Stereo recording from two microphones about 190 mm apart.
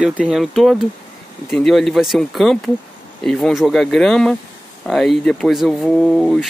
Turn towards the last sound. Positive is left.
turn(degrees=0)  # may be behind; listen again after turning